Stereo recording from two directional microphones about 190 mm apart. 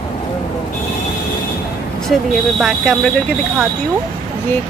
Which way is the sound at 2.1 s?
Centre (ahead or behind).